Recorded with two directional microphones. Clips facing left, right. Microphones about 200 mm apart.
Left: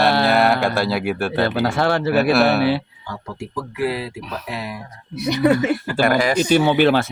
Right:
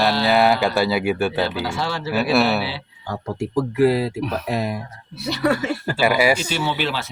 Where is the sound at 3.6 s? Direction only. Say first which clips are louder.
Right 6 dB; 40° right (ahead or behind).